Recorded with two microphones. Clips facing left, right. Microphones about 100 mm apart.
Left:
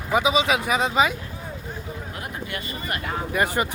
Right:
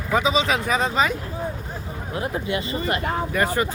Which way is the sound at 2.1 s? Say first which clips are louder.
Right 10 dB; 25° right (ahead or behind).